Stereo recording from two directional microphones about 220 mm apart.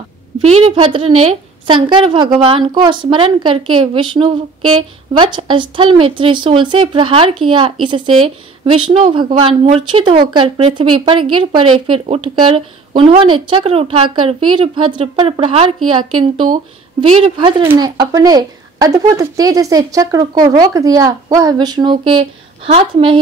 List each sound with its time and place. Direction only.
0.4 s a woman's voice: 30° right (ahead or behind)
17.1 s a woman's voice: 25° right (ahead or behind)